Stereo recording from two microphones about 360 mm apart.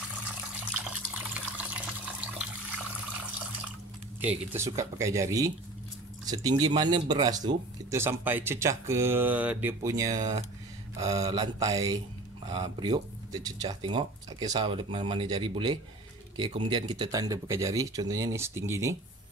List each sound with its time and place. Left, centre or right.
0.7 s water: centre
4.2 s speech: centre